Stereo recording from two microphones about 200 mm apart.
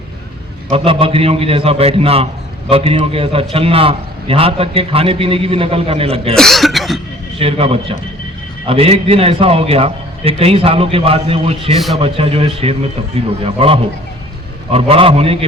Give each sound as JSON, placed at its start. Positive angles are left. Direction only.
{"t": 0.7, "sound": "a man's voice", "side_deg": -25}
{"t": 6.3, "sound": "cough", "side_deg": 0}
{"t": 7.3, "sound": "a man's voice", "side_deg": -30}